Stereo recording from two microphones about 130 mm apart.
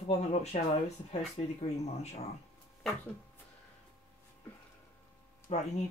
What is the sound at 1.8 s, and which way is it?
Speech, 55° left (ahead or behind).